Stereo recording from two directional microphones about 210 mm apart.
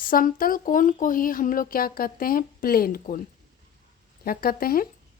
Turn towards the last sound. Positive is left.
turn(degrees=45)  # may be behind; listen again after turning